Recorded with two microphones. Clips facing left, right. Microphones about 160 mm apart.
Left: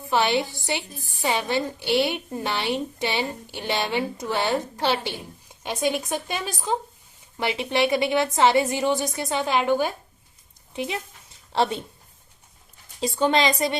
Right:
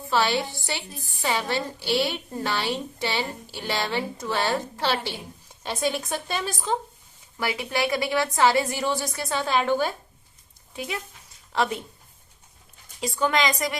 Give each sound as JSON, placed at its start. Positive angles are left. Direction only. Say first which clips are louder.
{"t": 0.1, "sound": "a woman's voice", "louder": "left 2 dB", "side_deg": 20}
{"t": 7.3, "sound": "a woman's voice", "louder": "left 3 dB", "side_deg": 25}
{"t": 10.8, "sound": "a sound", "louder": "left 3 dB", "side_deg": 25}
{"t": 13.0, "sound": "a woman's voice", "louder": "left 3 dB", "side_deg": 25}